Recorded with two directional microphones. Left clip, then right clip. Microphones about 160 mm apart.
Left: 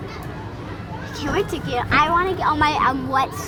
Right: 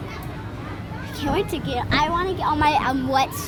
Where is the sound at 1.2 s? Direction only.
25° right (ahead or behind).